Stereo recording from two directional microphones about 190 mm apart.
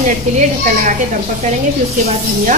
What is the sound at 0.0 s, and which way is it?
Speech, 40° right (ahead or behind).